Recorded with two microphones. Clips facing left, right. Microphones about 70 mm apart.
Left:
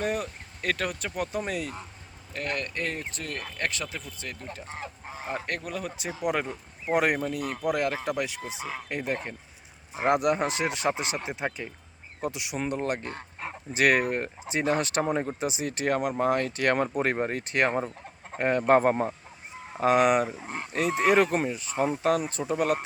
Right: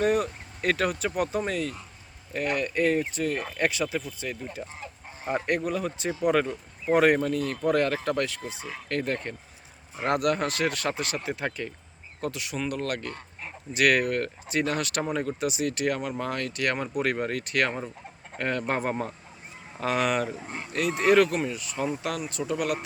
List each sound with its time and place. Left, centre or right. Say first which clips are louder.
0.0 s speech: right 5 dB; centre
2.3 s speech: right 5 dB; centre
5.6 s speech: right 5 dB; centre; by 18.6 s left
18.6 s speech: left 7 dB; left
19.7 s speech: left 5 dB; left